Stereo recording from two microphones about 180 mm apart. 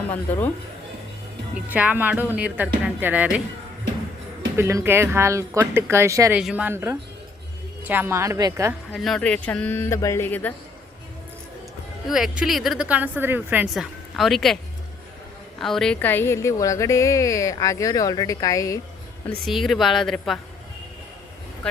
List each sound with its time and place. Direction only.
0.1 s a woman's voice: 10° left (ahead or behind)
1.5 s speech: 10° right (ahead or behind)
4.5 s speech: 15° right (ahead or behind)
8.9 s a woman's voice: centre (ahead or behind)
12.0 s speech: centre (ahead or behind)
14.2 s speech: centre (ahead or behind)
15.6 s a woman's voice: 5° left (ahead or behind); by 18.8 s 20° left (ahead or behind)
19.3 s speech: centre (ahead or behind)